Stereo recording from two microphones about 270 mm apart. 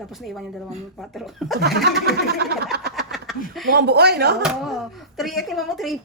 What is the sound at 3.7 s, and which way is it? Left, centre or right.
Speech, right.